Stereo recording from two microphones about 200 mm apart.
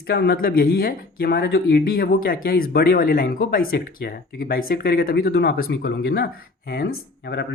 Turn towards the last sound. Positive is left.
turn(degrees=55)  # may be behind; listen again after turning